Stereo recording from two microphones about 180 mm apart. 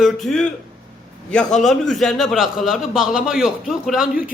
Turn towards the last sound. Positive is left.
turn(degrees=0)  # may be behind; listen again after turning